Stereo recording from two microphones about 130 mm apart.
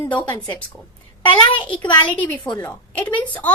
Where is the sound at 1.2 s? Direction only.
40° left (ahead or behind).